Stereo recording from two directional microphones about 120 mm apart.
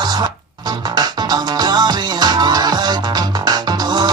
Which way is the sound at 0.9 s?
35° right (ahead or behind).